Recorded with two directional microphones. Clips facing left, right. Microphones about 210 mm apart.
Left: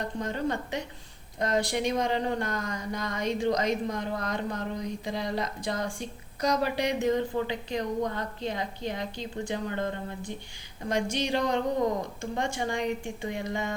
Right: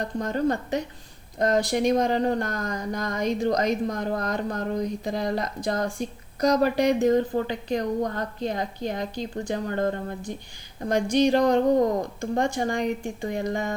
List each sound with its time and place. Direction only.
0.2 s speech: 45° right (ahead or behind)